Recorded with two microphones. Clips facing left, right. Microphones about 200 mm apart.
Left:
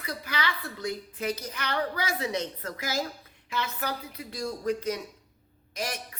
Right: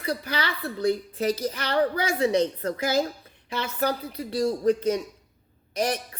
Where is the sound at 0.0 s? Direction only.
35° right (ahead or behind).